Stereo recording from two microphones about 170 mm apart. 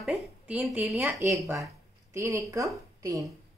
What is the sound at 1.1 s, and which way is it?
Speech, 15° right (ahead or behind).